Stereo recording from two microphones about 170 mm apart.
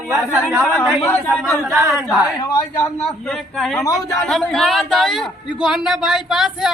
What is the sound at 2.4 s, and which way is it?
Speech, 20° left (ahead or behind).